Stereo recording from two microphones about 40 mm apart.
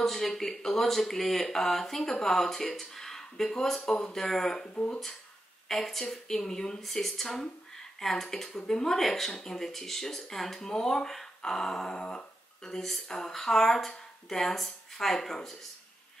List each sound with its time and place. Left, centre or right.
0.0 s speech: centre
4.7 s speech: left
5.7 s speech: centre
12.0 s a sound: left
12.6 s speech: centre